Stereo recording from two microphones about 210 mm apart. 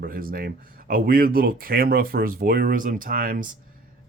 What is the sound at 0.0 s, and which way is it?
Speech, 45° right (ahead or behind).